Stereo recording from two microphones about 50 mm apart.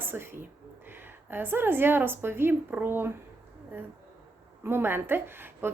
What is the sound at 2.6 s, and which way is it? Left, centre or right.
Speech, right.